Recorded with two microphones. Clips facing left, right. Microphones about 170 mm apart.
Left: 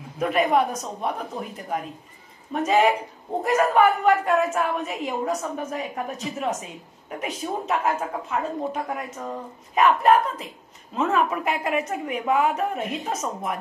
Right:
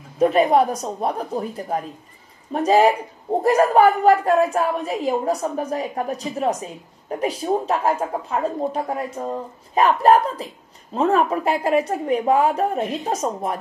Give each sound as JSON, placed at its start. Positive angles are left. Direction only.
{"t": 0.2, "sound": "a woman's voice", "side_deg": -30}